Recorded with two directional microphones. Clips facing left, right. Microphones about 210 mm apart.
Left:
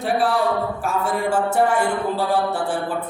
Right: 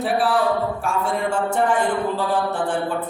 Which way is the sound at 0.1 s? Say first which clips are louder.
Left 2 dB; centre (ahead or behind).